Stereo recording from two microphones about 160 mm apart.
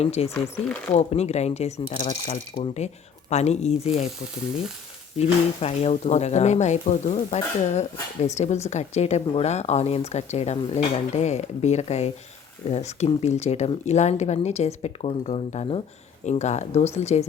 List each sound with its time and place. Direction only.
0.0 s speech: 40° left (ahead or behind)
5.1 s speech: 40° left (ahead or behind)